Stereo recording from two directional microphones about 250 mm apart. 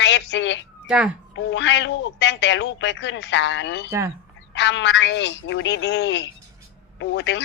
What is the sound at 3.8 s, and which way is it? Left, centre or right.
Speech, centre.